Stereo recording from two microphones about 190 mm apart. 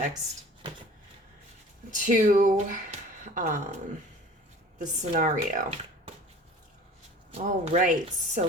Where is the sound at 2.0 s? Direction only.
45° right (ahead or behind).